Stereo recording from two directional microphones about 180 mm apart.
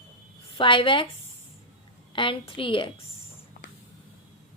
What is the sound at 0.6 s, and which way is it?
Speech, 30° left (ahead or behind).